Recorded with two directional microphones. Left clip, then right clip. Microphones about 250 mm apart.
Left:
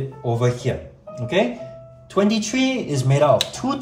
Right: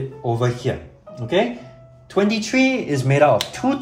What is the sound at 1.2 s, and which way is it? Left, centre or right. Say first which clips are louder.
Speech: right 1 dB; centre.